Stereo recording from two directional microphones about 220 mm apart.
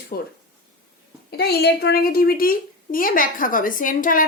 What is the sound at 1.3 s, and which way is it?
A woman's voice, 45° left (ahead or behind).